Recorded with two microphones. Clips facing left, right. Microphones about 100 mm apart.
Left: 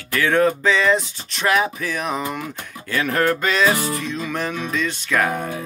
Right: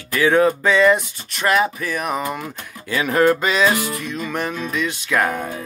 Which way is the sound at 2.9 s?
15° right (ahead or behind).